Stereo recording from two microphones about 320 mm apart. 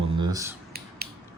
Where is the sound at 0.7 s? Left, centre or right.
Right.